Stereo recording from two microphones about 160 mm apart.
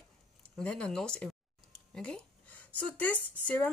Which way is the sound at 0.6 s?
5° left (ahead or behind).